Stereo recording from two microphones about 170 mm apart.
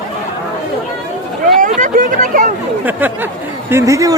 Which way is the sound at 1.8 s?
50° right (ahead or behind).